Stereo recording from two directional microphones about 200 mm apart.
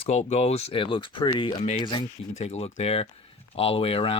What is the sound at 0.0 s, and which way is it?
Speech, 35° left (ahead or behind).